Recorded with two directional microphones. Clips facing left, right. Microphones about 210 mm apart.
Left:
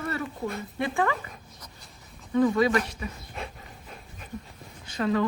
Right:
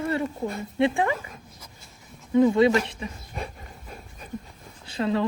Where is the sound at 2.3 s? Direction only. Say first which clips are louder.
Right 4 dB; 25° right (ahead or behind).